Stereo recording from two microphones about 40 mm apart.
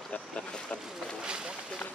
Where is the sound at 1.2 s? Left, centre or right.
Right.